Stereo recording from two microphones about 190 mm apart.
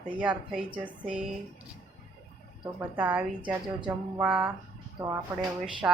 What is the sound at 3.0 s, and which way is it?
Speech, 10° right (ahead or behind).